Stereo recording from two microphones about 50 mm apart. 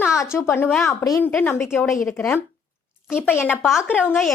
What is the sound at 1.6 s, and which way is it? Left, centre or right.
Speech, left.